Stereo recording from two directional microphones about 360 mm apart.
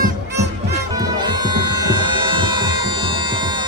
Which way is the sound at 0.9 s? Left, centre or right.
Centre.